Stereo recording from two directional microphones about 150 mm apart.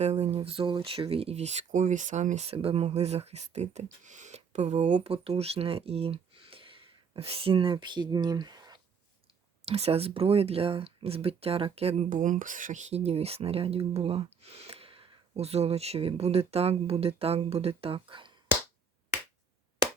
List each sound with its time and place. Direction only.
0.0 s speech: 45° right (ahead or behind); by 8.8 s 25° right (ahead or behind)
9.6 s speech: 40° right (ahead or behind)